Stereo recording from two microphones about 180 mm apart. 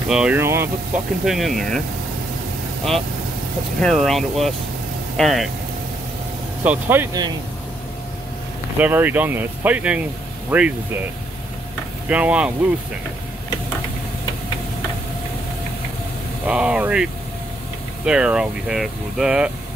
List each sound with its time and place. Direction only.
0.1 s speech: 5° right (ahead or behind)
1.2 s speech: centre (ahead or behind)
3.8 s speech: centre (ahead or behind)
6.6 s speech: 10° right (ahead or behind)
8.7 s speech: 10° right (ahead or behind)
12.1 s speech: 5° right (ahead or behind)
16.4 s speech: 5° right (ahead or behind)